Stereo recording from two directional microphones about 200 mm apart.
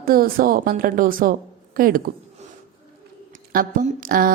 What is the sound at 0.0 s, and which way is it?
A woman's voice, 45° right (ahead or behind).